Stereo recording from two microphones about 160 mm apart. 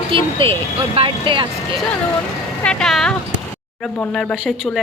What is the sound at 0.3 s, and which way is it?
Speech, 35° right (ahead or behind).